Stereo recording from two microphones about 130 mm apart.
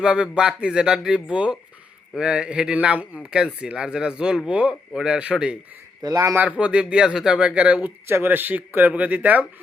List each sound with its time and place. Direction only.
0.0 s speech: 5° right (ahead or behind)
6.0 s a man's voice: 25° right (ahead or behind)
6.4 s speech: 10° right (ahead or behind)